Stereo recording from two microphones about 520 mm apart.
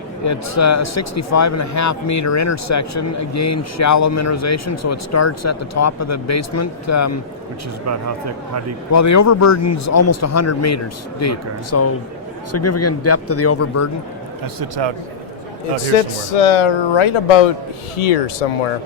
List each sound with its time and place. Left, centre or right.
0.3 s speech: left
7.9 s speech: right
8.9 s a man's voice: left
14.4 s a man's voice: right
16.3 s speech: left